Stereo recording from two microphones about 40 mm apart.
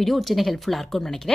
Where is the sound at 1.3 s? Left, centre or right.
Centre.